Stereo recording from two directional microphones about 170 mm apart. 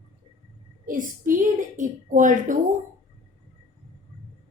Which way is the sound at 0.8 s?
55° right (ahead or behind).